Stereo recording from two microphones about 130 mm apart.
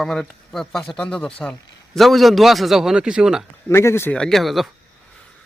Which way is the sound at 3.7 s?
20° left (ahead or behind).